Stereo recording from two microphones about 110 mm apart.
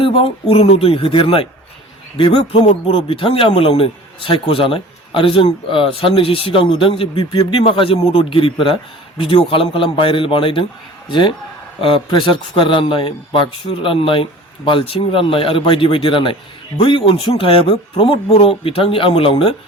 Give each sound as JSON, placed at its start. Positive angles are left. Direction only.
{"t": 0.0, "sound": "a man's voice", "side_deg": 55}